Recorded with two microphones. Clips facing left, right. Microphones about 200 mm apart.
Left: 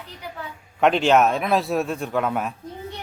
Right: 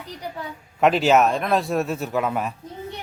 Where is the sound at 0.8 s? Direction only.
5° right (ahead or behind).